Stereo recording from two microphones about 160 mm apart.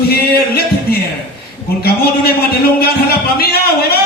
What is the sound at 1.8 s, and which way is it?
A man's voice, 75° left (ahead or behind).